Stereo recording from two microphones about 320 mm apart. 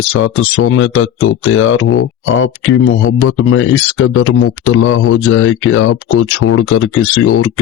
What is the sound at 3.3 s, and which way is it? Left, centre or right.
Speech, left.